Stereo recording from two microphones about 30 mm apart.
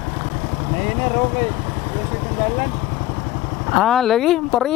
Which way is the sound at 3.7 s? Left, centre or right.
Centre.